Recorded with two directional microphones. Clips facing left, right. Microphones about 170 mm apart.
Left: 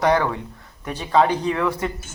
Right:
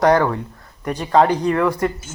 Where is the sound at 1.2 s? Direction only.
10° right (ahead or behind).